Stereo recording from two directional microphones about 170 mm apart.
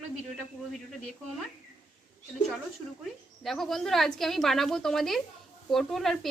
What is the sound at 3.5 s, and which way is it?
Speech, centre (ahead or behind).